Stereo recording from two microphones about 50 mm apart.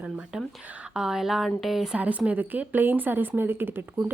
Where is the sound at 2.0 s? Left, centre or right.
Right.